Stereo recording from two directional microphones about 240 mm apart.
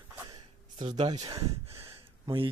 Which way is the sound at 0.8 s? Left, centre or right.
Centre.